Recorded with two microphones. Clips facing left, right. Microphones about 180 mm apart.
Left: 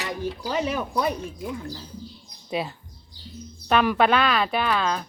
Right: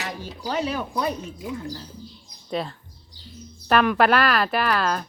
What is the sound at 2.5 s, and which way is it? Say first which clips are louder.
Speech: even; 5° left (ahead or behind).